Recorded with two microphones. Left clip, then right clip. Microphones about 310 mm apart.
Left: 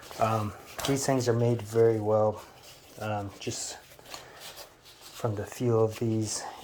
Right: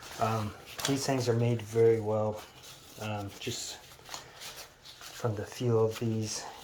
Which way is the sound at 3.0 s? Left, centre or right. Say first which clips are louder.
Left 4 dB; centre.